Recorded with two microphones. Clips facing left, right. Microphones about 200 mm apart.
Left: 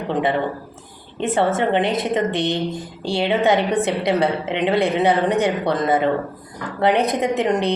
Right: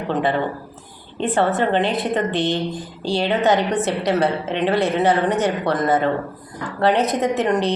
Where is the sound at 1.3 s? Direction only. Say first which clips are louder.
Even; 25° left (ahead or behind).